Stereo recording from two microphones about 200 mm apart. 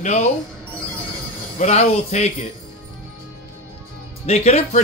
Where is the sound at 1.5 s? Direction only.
35° left (ahead or behind).